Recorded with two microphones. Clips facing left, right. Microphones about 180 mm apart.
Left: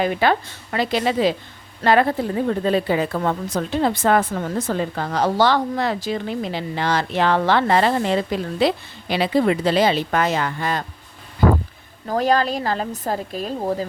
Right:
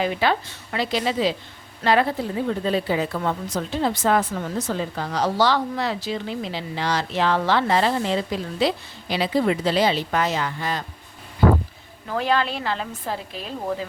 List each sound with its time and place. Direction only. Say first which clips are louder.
0.0 s a woman's voice: left 3 dB; 50° left (ahead or behind)
12.0 s a woman's voice: left 4 dB; 40° left (ahead or behind)